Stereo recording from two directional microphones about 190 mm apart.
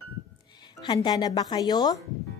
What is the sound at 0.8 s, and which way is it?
Speech, 20° left (ahead or behind).